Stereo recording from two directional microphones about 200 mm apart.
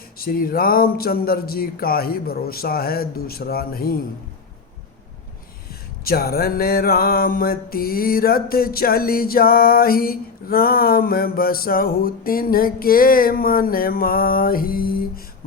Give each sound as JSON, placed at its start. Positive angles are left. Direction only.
{"t": 0.2, "sound": "music", "side_deg": 45}
{"t": 6.1, "sound": "music", "side_deg": 50}